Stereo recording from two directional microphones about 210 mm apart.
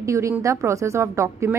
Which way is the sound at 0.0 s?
15° right (ahead or behind).